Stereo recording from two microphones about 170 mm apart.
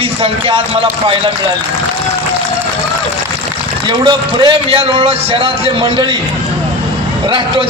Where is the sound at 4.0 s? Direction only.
30° right (ahead or behind).